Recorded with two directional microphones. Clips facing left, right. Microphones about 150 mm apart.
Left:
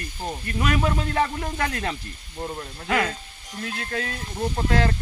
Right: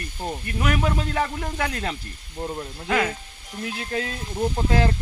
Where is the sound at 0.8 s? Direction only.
5° right (ahead or behind).